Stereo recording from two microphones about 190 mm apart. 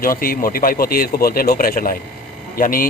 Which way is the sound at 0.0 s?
50° left (ahead or behind).